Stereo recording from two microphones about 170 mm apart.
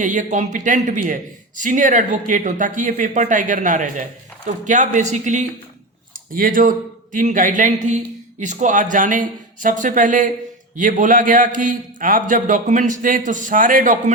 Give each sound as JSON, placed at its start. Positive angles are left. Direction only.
{"t": 0.0, "sound": "a man's voice", "side_deg": -50}